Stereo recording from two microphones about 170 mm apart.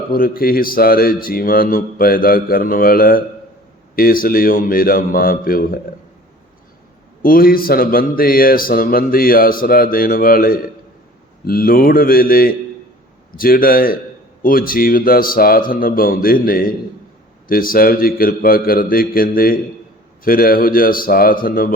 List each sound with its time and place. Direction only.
0.1 s speech: 60° left (ahead or behind)
7.2 s speech: 60° left (ahead or behind)